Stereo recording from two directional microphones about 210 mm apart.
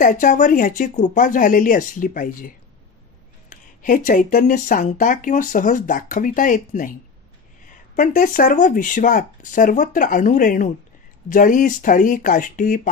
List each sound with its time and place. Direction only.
0.0 s speech: 40° left (ahead or behind)
7.9 s speech: 40° left (ahead or behind)